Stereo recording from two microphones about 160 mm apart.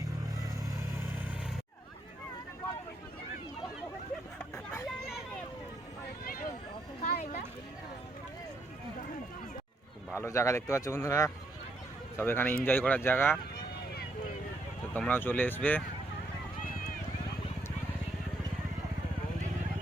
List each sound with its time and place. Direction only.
4.5 s hubbub: 15° left (ahead or behind)
4.9 s vehicle: centre (ahead or behind)
6.2 s a sound: 65° left (ahead or behind)
7.0 s a sound: 50° left (ahead or behind)
10.2 s speech: 20° left (ahead or behind)
14.9 s speech: 10° left (ahead or behind)